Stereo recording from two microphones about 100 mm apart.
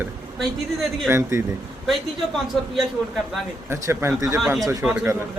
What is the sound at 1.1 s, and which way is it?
Speech, 25° right (ahead or behind).